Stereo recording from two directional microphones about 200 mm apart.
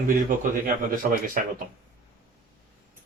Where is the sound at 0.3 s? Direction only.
40° right (ahead or behind).